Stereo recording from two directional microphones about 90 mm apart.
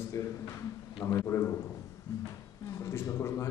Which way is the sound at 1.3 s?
30° left (ahead or behind).